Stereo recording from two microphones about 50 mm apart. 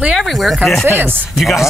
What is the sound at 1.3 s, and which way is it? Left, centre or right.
Speech, centre.